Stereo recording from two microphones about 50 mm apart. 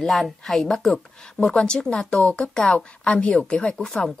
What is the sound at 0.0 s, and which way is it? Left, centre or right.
Speech, centre.